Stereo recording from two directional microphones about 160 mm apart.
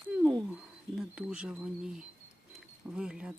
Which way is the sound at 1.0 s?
5° right (ahead or behind).